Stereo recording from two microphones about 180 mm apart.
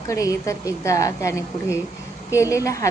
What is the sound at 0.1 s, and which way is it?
A woman's voice, 15° left (ahead or behind).